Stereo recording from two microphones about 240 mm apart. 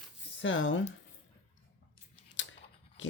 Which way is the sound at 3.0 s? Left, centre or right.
Left.